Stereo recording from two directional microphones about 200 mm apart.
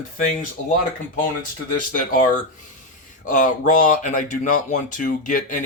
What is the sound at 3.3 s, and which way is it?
Speech, 40° left (ahead or behind).